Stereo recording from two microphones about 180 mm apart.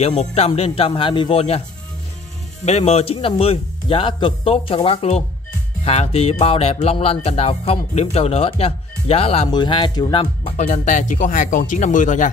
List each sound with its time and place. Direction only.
0.0 s speech: 35° left (ahead or behind)
2.6 s speech: 35° left (ahead or behind)
10.7 s speech: 45° left (ahead or behind)